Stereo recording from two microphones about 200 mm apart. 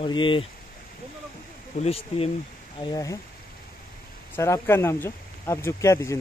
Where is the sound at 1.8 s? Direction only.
30° left (ahead or behind).